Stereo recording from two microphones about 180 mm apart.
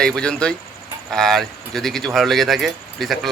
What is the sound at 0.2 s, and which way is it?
Speech, 5° left (ahead or behind).